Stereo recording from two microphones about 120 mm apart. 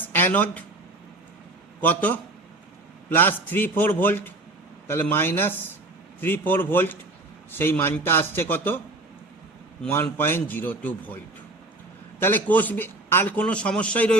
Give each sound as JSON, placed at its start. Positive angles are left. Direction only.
{"t": 0.0, "sound": "a sound", "side_deg": 15}
{"t": 1.8, "sound": "a man's voice", "side_deg": 15}
{"t": 9.9, "sound": "a man's voice", "side_deg": 20}
{"t": 12.2, "sound": "a man's voice", "side_deg": 15}